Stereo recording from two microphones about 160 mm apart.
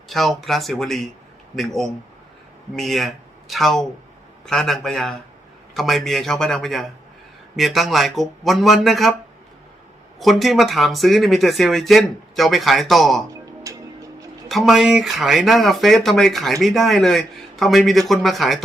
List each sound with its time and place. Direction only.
0.1 s speech: centre (ahead or behind)
10.2 s speech: centre (ahead or behind)
13.7 s tick-tock: 20° right (ahead or behind)
14.4 s speech: centre (ahead or behind)